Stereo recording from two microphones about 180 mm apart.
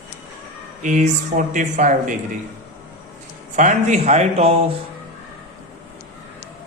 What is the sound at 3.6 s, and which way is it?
Speech, 40° right (ahead or behind).